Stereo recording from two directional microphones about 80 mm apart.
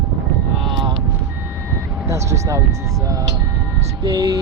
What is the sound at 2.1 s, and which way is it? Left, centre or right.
Speech, right.